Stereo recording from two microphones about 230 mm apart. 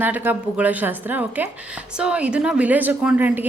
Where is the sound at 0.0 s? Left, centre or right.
Centre.